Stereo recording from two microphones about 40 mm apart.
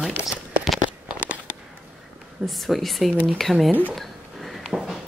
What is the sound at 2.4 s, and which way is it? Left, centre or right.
Speech, centre.